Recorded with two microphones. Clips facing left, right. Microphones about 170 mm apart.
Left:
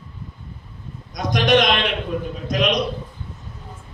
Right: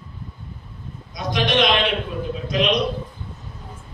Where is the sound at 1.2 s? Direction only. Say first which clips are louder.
Left 4 dB; 45° left (ahead or behind).